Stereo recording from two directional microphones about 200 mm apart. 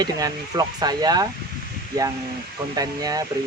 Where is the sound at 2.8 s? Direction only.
20° right (ahead or behind).